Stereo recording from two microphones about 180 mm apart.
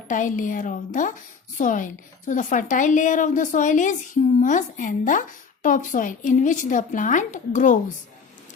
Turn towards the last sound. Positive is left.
turn(degrees=45)  # may be behind; listen again after turning